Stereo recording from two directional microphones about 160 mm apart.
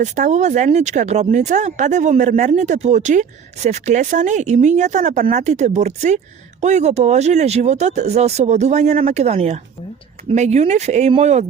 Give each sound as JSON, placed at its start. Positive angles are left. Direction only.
{"t": 0.0, "sound": "speech", "side_deg": -50}